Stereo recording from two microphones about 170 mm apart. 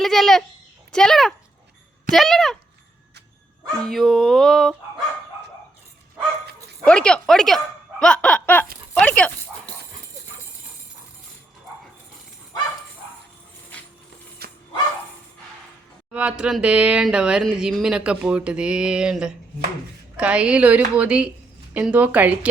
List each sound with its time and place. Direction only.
0.0 s a child's voice: centre (ahead or behind)
3.8 s speech: centre (ahead or behind)
6.8 s speech: 5° left (ahead or behind)
9.0 s dog: 5° left (ahead or behind)
14.4 s bow-wow: 65° right (ahead or behind)
16.1 s a woman's voice: 5° right (ahead or behind)